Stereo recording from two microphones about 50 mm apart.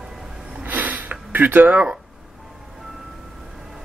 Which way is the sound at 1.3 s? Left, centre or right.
Right.